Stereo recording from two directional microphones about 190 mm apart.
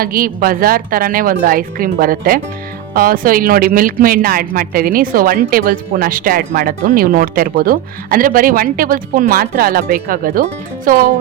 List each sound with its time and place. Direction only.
0.0 s speech: 50° right (ahead or behind)